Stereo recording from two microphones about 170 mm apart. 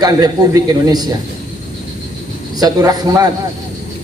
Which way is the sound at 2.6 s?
20° right (ahead or behind).